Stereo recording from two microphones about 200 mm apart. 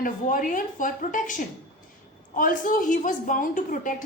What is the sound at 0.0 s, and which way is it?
A woman's voice, 40° left (ahead or behind).